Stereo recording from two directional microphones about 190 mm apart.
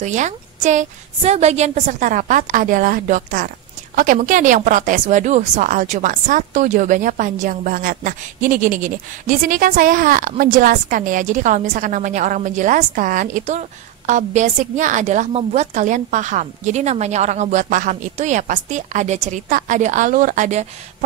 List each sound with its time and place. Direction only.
0.0 s speech: 40° right (ahead or behind)